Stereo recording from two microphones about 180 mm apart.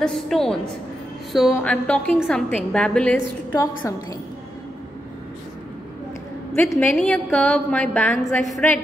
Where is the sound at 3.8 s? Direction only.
15° left (ahead or behind).